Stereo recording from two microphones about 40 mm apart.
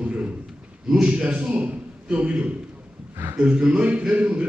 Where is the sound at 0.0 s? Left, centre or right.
Right.